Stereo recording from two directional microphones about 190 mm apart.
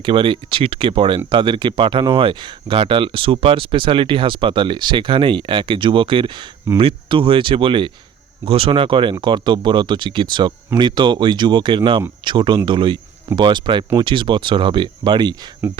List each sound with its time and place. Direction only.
0.0 s speech: 25° right (ahead or behind)